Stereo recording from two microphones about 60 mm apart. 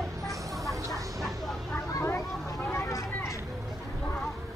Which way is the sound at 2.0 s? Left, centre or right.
Left.